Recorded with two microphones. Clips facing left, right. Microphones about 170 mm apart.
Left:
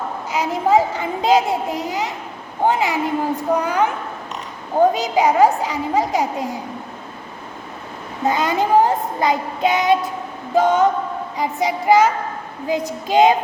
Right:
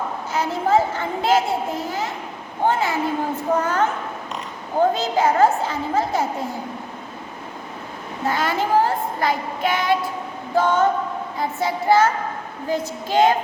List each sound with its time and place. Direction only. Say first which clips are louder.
0.3 s a sound: left 3 dB; 15° left (ahead or behind)
2.6 s a child's voice: left 2 dB; 15° left (ahead or behind)
4.9 s a child's voice: left 2 dB; 15° left (ahead or behind)
8.2 s child singing: left 3 dB; 20° left (ahead or behind)
10.5 s a child's voice: left 3 dB; 15° left (ahead or behind)